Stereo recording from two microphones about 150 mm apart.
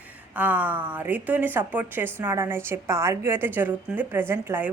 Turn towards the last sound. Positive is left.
turn(degrees=-15)  # may be behind; listen again after turning